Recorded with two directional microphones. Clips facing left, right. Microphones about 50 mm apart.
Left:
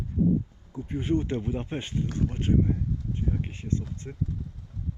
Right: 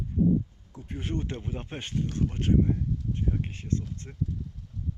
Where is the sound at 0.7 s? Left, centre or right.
Centre.